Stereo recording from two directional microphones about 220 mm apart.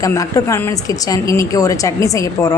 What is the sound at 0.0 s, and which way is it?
A woman's voice, 15° left (ahead or behind).